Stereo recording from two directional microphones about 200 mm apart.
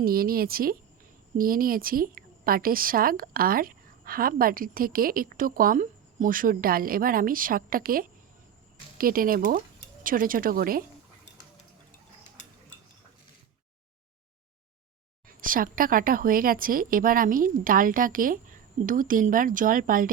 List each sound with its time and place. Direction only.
0.0 s a woman's voice: 50° right (ahead or behind)
15.3 s a woman's voice: 45° right (ahead or behind)